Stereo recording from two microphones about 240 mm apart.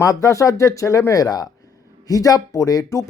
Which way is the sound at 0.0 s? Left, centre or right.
Centre.